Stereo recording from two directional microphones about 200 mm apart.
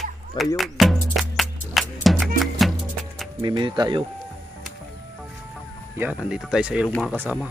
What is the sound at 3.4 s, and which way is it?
Speech, 25° right (ahead or behind).